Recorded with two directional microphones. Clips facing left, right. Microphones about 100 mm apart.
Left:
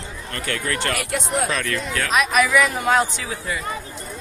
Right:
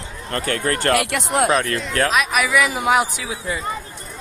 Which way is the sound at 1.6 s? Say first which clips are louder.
Right 4 dB; 35° right (ahead or behind).